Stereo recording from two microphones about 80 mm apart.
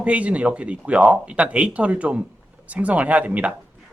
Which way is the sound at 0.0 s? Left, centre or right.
Centre.